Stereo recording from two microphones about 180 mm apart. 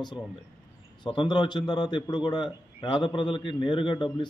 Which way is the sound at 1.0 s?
25° left (ahead or behind).